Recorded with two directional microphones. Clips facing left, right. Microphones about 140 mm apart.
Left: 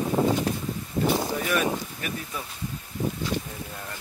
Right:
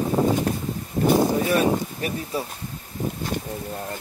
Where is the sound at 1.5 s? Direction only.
35° right (ahead or behind).